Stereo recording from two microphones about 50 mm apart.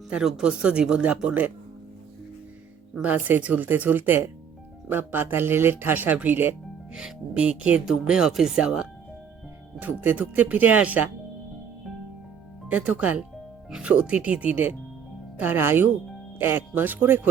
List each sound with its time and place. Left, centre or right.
0.2 s speech: centre
0.4 s speech: right
1.3 s speech: right
2.9 s speech: right
6.9 s speech: centre
7.9 s speech: centre
9.8 s speech: right
10.2 s speech: right
12.7 s speech: right
15.4 s speech: right